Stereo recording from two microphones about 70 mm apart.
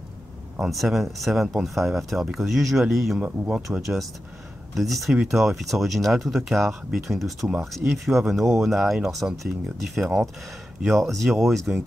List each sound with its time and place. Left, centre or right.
0.7 s speech: centre
3.2 s speech: right
3.6 s speech: centre
5.1 s speech: centre
5.4 s speech: centre
7.8 s speech: right
8.2 s speech: centre